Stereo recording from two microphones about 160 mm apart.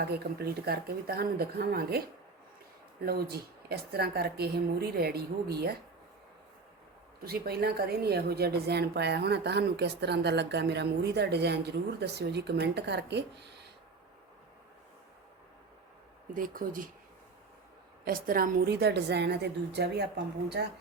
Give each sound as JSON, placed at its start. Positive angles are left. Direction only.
{"t": 0.0, "sound": "speech", "side_deg": -80}
{"t": 3.1, "sound": "speech", "side_deg": -75}
{"t": 7.3, "sound": "a woman's voice", "side_deg": -75}
{"t": 16.3, "sound": "speech", "side_deg": -60}
{"t": 18.0, "sound": "a woman's voice", "side_deg": -65}